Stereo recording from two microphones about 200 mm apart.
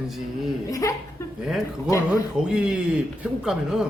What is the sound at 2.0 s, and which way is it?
Speech, 5° right (ahead or behind).